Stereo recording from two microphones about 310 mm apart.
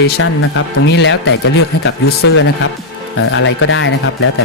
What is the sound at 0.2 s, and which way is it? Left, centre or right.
Speech, left.